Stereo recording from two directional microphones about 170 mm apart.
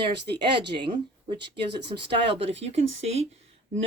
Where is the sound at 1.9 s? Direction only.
35° right (ahead or behind).